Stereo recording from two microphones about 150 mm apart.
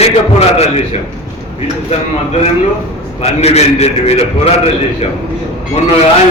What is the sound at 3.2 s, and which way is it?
A man's voice, 45° left (ahead or behind).